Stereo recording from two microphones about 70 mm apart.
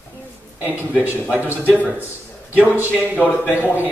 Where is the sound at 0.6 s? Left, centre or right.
Right.